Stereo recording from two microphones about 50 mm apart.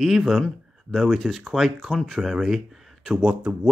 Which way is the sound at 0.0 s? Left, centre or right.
Centre.